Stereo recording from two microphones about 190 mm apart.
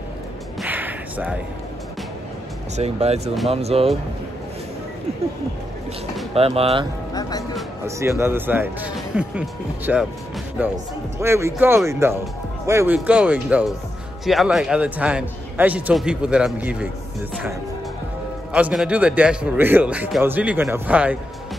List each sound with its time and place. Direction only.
0.6 s a sound: 10° right (ahead or behind)
2.7 s speech: 35° right (ahead or behind)
6.3 s speech: 30° right (ahead or behind)
7.2 s music: 20° left (ahead or behind)
7.8 s a man's voice: 15° right (ahead or behind)
18.5 s speech: 5° right (ahead or behind)